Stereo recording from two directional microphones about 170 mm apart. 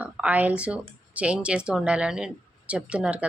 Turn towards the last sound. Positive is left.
turn(degrees=-5)  # may be behind; listen again after turning